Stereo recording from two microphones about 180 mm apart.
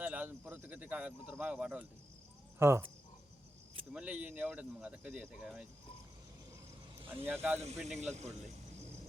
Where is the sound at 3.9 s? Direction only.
5° right (ahead or behind).